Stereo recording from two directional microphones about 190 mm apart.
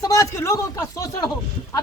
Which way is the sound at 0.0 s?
15° left (ahead or behind).